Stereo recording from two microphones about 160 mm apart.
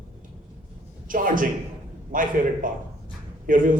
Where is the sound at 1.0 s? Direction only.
60° right (ahead or behind).